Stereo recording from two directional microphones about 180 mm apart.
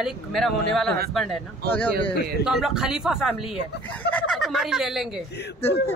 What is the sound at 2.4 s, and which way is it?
A woman's voice, centre (ahead or behind).